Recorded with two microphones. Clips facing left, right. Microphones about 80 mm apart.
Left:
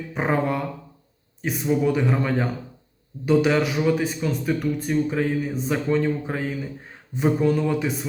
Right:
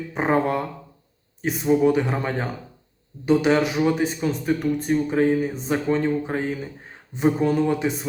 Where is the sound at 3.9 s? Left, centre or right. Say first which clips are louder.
Even; right.